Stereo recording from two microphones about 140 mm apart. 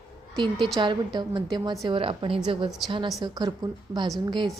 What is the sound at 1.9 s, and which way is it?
Speech, 40° right (ahead or behind).